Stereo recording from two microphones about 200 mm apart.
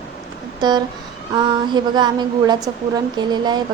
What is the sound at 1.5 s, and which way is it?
A woman's voice, 20° right (ahead or behind).